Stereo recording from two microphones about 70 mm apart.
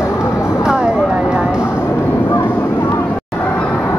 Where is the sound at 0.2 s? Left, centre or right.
Left.